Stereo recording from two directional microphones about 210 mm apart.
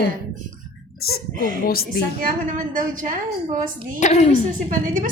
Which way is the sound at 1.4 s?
40° right (ahead or behind).